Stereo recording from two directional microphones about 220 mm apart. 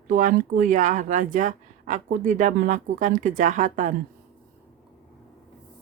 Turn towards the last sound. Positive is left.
turn(degrees=-35)  # may be behind; listen again after turning